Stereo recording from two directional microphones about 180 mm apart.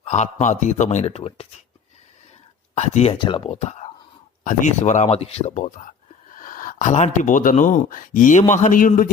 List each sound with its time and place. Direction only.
0.0 s speech: 40° left (ahead or behind)
2.7 s speech: 40° left (ahead or behind)